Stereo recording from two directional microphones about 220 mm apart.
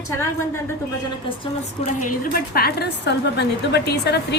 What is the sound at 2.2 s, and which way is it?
A woman's voice, 40° left (ahead or behind).